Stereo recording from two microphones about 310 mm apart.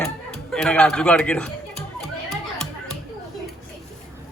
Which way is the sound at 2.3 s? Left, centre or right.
Centre.